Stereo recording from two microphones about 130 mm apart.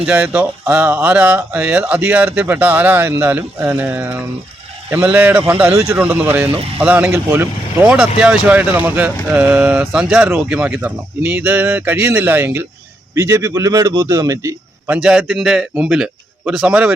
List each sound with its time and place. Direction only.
0.1 s a man's voice: 15° right (ahead or behind)
14.8 s a man's voice: 10° right (ahead or behind)